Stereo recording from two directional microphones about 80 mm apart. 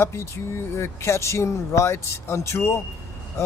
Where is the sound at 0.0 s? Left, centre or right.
Left.